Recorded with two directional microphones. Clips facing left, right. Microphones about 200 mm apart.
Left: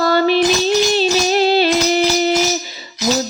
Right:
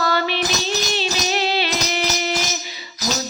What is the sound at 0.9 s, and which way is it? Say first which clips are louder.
Music: left 8 dB; 40° left (ahead or behind).